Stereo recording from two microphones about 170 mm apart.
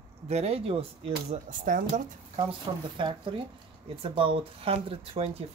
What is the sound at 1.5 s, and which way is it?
Speech, 50° right (ahead or behind).